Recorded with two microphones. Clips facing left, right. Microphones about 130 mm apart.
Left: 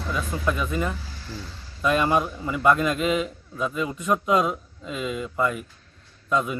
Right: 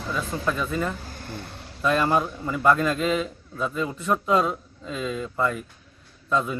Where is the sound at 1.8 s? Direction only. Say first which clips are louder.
Even; 10° left (ahead or behind).